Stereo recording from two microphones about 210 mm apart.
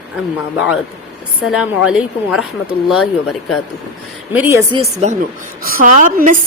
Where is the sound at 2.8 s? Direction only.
Centre (ahead or behind).